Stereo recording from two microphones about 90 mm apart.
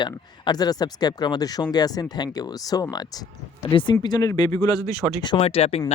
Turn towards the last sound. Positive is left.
turn(degrees=75)  # may be behind; listen again after turning